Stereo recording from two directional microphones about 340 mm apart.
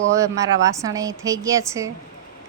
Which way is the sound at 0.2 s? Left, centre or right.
Centre.